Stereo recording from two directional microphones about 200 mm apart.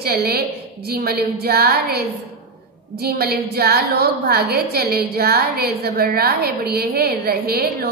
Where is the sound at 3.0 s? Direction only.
50° right (ahead or behind).